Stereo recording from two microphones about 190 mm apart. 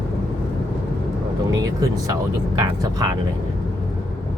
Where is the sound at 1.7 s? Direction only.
20° right (ahead or behind).